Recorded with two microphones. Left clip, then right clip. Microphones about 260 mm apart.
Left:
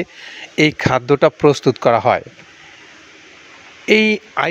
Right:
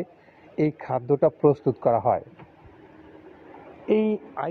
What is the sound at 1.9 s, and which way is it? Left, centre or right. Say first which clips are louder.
Speech: left 7 dB; left.